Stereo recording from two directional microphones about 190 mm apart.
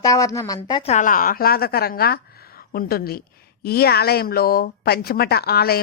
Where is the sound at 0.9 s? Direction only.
40° left (ahead or behind).